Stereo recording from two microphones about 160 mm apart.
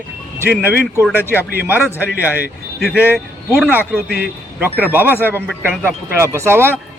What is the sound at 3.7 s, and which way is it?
Speech, 10° right (ahead or behind).